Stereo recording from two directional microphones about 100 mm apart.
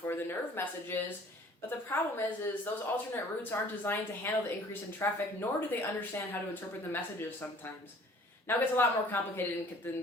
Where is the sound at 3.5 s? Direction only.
25° left (ahead or behind).